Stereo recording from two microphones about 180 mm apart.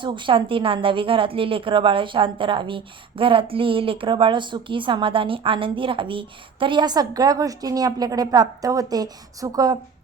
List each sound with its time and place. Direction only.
0.0 s a woman's voice: 25° right (ahead or behind)